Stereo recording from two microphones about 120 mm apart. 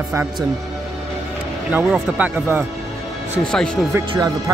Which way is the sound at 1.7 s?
10° right (ahead or behind).